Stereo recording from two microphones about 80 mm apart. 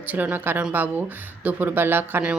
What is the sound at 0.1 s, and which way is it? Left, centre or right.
Speech, right.